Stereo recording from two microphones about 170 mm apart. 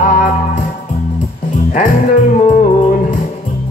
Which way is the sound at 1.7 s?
50° left (ahead or behind).